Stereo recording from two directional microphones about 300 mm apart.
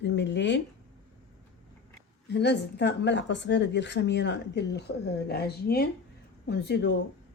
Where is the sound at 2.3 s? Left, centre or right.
Left.